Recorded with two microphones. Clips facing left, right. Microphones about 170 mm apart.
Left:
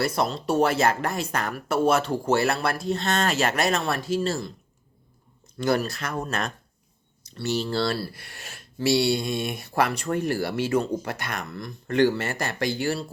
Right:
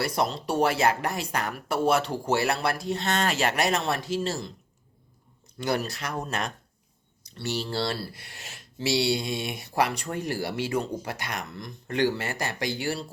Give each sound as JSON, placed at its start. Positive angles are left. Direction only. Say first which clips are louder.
{"t": 0.0, "sound": "speech", "louder": "left 2 dB", "side_deg": -15}
{"t": 5.5, "sound": "speech", "louder": "left 4 dB", "side_deg": -15}
{"t": 7.7, "sound": "speech", "louder": "left 4 dB", "side_deg": -20}
{"t": 8.8, "sound": "speech", "louder": "left 3 dB", "side_deg": 55}
{"t": 9.6, "sound": "speech", "louder": "right 1 dB", "side_deg": -15}